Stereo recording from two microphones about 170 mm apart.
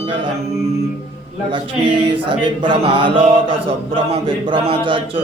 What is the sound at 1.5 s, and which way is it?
Mantra, 30° right (ahead or behind).